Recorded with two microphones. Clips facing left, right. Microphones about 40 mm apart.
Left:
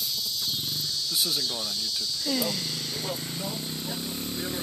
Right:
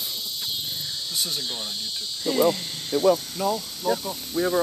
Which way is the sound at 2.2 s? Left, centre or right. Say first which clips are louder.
Right 9 dB; right.